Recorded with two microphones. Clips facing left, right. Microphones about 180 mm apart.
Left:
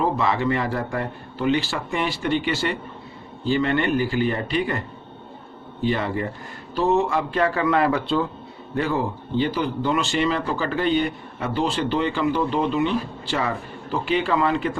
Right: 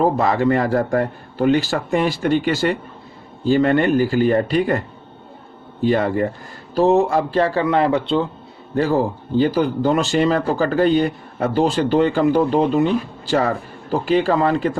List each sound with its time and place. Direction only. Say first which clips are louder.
0.0 s a man's voice: right 5 dB; 45° right (ahead or behind)
5.8 s a man's voice: right 6 dB; 45° right (ahead or behind); by 8.3 s 25° right (ahead or behind)
8.7 s speech: right 6 dB; 35° right (ahead or behind)